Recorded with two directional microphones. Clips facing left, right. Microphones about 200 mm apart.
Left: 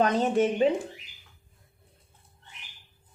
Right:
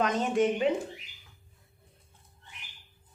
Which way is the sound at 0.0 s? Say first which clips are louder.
Left 3 dB; 30° left (ahead or behind).